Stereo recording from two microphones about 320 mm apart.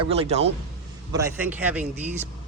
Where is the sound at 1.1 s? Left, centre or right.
Centre.